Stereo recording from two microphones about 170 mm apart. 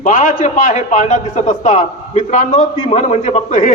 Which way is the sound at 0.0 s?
50° left (ahead or behind).